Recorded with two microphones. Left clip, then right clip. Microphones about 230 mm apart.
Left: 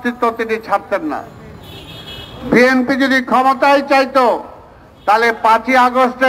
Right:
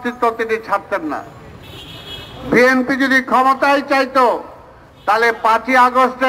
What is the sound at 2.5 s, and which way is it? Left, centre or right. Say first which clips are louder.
A man's voice: left 1 dB; left.